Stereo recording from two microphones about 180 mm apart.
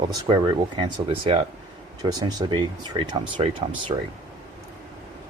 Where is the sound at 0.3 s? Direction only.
25° right (ahead or behind).